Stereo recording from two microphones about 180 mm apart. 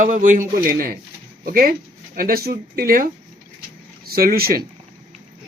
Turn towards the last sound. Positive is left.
turn(degrees=-55)  # may be behind; listen again after turning